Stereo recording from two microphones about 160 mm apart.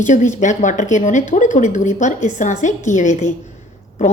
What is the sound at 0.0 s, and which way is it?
A woman's voice, 50° left (ahead or behind).